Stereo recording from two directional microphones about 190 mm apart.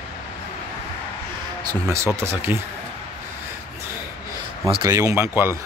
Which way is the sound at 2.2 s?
10° right (ahead or behind).